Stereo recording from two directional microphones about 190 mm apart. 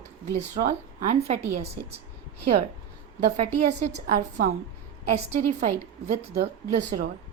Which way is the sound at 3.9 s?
50° right (ahead or behind).